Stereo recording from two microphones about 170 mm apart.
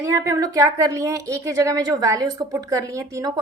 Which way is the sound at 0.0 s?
15° right (ahead or behind).